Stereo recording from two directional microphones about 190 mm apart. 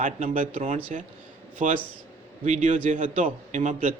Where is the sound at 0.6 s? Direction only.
30° right (ahead or behind).